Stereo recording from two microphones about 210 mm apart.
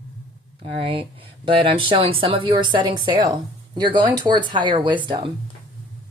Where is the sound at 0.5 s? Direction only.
25° right (ahead or behind).